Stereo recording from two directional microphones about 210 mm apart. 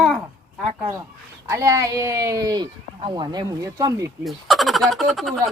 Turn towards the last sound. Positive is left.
turn(degrees=0)  # may be behind; listen again after turning